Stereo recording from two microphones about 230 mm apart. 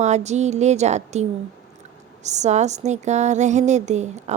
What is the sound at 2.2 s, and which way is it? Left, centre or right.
Speech, right.